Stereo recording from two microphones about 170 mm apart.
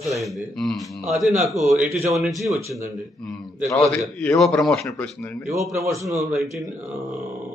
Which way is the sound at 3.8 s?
5° left (ahead or behind).